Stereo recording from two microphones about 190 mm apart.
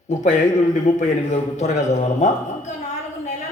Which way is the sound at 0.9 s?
40° left (ahead or behind).